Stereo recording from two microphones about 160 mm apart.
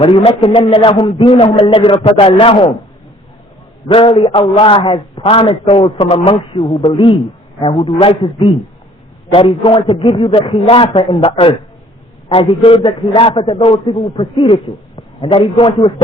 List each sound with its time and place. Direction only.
0.0 s a man's voice: 35° left (ahead or behind)
3.8 s a man's voice: 35° left (ahead or behind)